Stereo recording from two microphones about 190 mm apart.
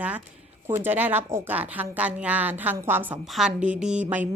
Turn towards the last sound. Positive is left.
turn(degrees=-5)  # may be behind; listen again after turning